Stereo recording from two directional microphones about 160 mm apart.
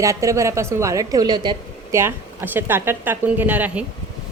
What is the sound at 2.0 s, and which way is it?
A woman's voice, 15° right (ahead or behind).